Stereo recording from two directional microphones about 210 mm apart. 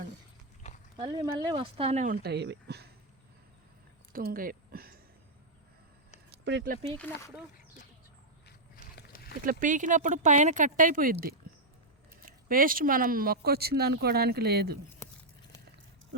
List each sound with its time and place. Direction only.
0.9 s speech: 20° right (ahead or behind)
2.2 s speech: 55° right (ahead or behind)
4.1 s speech: 45° right (ahead or behind)
6.3 s speech: 55° right (ahead or behind)
8.4 s a sound: 45° left (ahead or behind)
9.4 s speech: 40° right (ahead or behind)